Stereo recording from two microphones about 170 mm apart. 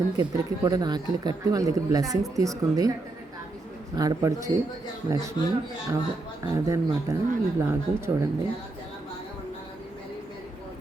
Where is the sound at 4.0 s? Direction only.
20° right (ahead or behind).